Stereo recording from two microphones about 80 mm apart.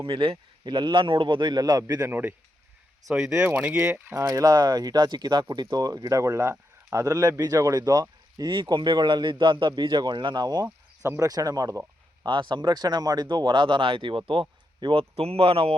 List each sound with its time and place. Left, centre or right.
0.6 s speech: right
2.0 s speech: right
4.1 s speech: right
5.7 s speech: right
8.6 s speech: right
10.7 s cricket: right
11.2 s speech: right
12.2 s speech: right
14.8 s speech: right